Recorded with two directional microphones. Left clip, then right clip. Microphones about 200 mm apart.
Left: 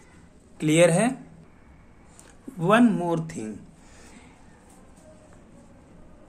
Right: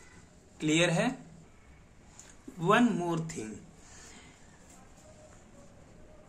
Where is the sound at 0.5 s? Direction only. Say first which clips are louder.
Left 9 dB; 50° left (ahead or behind).